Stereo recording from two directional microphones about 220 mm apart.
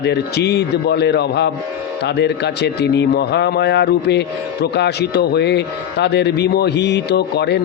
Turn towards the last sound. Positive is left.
turn(degrees=50)  # may be behind; listen again after turning